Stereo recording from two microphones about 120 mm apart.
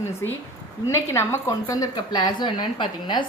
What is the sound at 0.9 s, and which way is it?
Speech, 20° left (ahead or behind).